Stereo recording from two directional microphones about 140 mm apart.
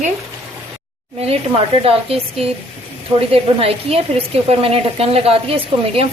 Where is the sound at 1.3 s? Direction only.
45° right (ahead or behind).